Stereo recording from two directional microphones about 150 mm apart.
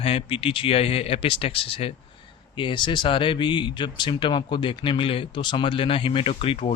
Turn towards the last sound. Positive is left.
turn(degrees=40)  # may be behind; listen again after turning